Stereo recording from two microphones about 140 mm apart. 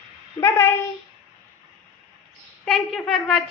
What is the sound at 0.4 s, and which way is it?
Speech, 20° left (ahead or behind).